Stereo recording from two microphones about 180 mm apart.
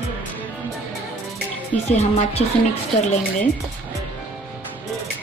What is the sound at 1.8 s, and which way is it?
Speech, 35° left (ahead or behind).